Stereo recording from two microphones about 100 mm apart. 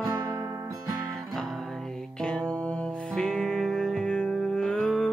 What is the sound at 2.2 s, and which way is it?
Music, 10° left (ahead or behind).